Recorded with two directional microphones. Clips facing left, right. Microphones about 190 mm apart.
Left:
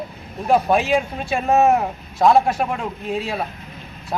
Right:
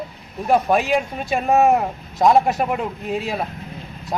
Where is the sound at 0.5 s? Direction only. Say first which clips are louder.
Even; centre (ahead or behind).